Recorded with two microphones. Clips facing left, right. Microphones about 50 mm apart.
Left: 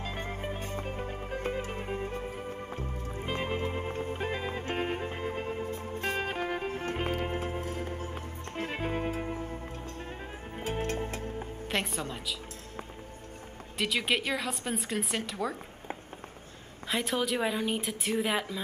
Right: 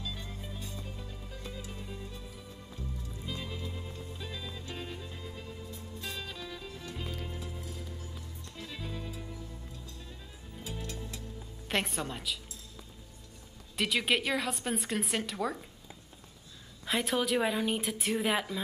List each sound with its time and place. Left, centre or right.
0.0 s music: left
11.7 s a woman's voice: centre
13.7 s a woman's voice: centre
16.8 s a woman's voice: centre